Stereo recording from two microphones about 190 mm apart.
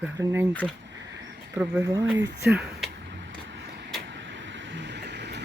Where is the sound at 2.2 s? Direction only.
60° right (ahead or behind).